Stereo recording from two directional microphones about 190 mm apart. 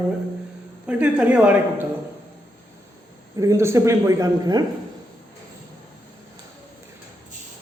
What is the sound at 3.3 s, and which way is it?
A man's voice, 15° right (ahead or behind).